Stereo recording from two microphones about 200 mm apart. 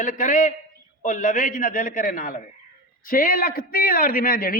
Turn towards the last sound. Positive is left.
turn(degrees=45)  # may be behind; listen again after turning